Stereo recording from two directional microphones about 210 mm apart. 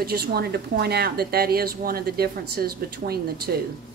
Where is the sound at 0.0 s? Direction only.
50° right (ahead or behind).